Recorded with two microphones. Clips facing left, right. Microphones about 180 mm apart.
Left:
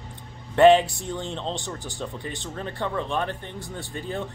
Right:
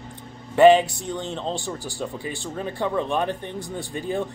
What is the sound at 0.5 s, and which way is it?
Speech, centre (ahead or behind).